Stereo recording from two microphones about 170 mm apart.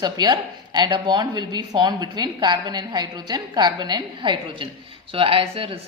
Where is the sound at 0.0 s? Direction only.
25° right (ahead or behind).